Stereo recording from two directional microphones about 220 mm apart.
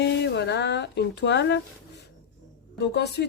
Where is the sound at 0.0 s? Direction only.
50° left (ahead or behind).